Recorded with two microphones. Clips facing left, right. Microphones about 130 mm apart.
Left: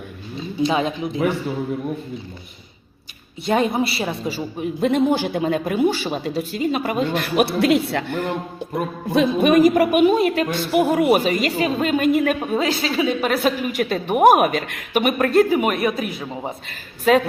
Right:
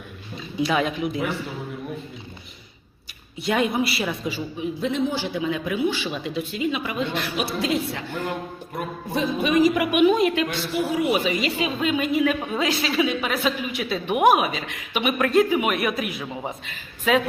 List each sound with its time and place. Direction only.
0.6 s speech: 30° left (ahead or behind)
3.4 s a woman's voice: 25° left (ahead or behind); by 8.3 s 70° left (ahead or behind)
9.1 s a woman's voice: 55° left (ahead or behind)
14.3 s a woman's voice: 55° left (ahead or behind)
16.0 s speech: 30° left (ahead or behind)
16.6 s speech: 40° left (ahead or behind)